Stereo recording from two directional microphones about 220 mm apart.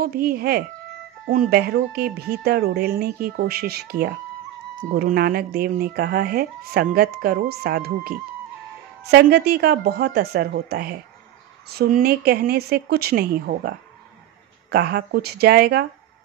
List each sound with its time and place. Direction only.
0.0 s speech: 45° right (ahead or behind)
9.1 s speech: 45° right (ahead or behind)